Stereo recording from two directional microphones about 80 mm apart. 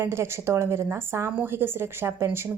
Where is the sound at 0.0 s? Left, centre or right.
Right.